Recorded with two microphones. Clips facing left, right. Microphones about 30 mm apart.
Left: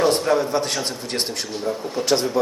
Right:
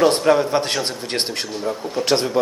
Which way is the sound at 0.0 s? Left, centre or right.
Right.